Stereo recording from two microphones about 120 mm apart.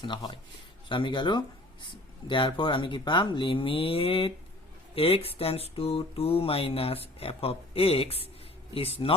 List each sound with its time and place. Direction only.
0.0 s speech: 40° left (ahead or behind)
1.9 s music: 45° left (ahead or behind)